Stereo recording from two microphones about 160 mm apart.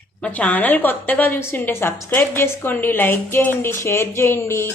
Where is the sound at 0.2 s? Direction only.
10° left (ahead or behind).